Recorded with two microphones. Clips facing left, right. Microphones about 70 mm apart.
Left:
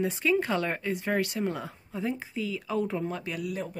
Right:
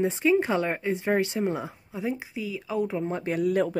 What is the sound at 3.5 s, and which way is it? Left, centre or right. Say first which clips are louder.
Speech: right 10 dB; right.